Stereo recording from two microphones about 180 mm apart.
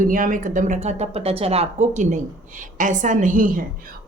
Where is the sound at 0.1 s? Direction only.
50° right (ahead or behind).